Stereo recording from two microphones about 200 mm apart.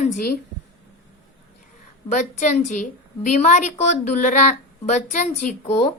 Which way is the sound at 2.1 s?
35° left (ahead or behind).